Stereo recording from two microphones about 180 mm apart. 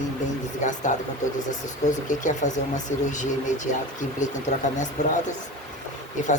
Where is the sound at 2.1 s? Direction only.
45° left (ahead or behind).